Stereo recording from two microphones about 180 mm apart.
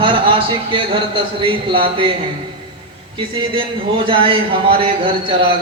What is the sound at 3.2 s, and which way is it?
Speech, 30° right (ahead or behind).